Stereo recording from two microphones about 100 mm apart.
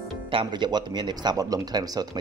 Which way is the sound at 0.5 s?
45° right (ahead or behind).